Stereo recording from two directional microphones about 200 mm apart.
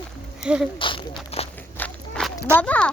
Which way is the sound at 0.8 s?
25° left (ahead or behind).